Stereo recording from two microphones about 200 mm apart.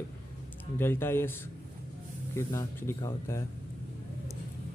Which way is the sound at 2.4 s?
15° left (ahead or behind).